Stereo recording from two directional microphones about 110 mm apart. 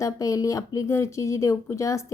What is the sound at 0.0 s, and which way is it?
A woman's voice, 30° left (ahead or behind).